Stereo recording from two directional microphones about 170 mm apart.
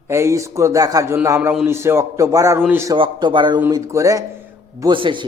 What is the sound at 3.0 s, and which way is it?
A man's voice, 25° right (ahead or behind).